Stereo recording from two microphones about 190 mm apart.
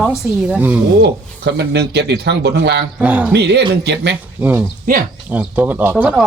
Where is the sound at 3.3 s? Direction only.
65° right (ahead or behind).